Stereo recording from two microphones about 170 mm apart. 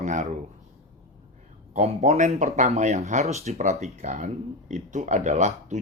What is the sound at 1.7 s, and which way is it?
Speech, 45° right (ahead or behind).